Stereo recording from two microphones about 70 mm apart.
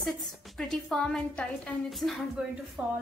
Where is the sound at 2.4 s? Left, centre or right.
Centre.